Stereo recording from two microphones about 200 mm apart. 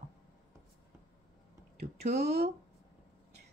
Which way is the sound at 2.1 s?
55° right (ahead or behind).